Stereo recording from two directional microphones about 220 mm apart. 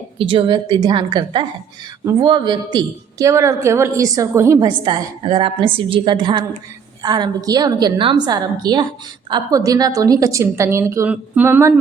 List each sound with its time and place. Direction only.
0.2 s a woman's voice: 25° right (ahead or behind)